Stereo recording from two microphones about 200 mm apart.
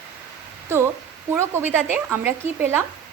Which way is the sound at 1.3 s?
10° right (ahead or behind).